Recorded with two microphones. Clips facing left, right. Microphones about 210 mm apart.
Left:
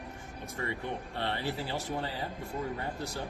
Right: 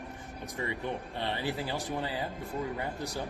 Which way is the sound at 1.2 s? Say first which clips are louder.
Even; 15° right (ahead or behind).